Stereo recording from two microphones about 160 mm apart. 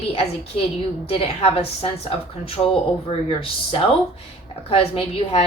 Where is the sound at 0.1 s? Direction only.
40° left (ahead or behind).